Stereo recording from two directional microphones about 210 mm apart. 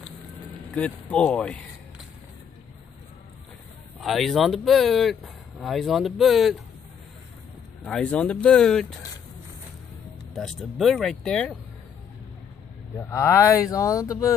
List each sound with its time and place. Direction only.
0.7 s speech: 5° left (ahead or behind)
4.0 s speech: centre (ahead or behind)
7.8 s speech: 5° left (ahead or behind)
10.3 s speech: centre (ahead or behind)
12.9 s speech: 15° left (ahead or behind)